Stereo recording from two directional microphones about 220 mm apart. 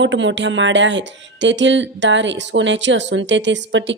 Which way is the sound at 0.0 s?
55° right (ahead or behind).